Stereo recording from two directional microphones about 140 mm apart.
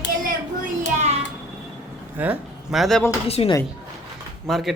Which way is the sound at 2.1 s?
10° right (ahead or behind).